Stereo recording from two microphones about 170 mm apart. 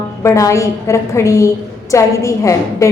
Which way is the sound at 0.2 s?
20° left (ahead or behind).